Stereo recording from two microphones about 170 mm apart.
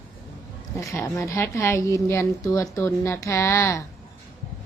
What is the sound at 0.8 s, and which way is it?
A woman's voice, 20° left (ahead or behind).